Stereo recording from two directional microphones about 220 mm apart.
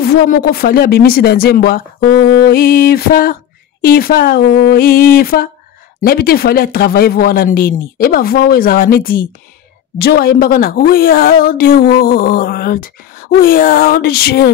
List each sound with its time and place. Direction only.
0.0 s speech: 45° left (ahead or behind)